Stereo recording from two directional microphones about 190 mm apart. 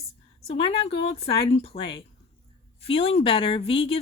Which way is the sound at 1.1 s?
35° left (ahead or behind).